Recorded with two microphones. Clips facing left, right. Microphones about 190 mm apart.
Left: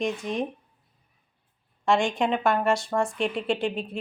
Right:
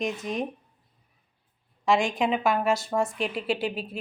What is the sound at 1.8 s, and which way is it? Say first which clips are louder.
Speech: even; centre (ahead or behind).